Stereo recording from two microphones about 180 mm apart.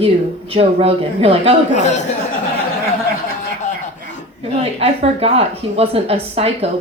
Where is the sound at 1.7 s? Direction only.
40° left (ahead or behind).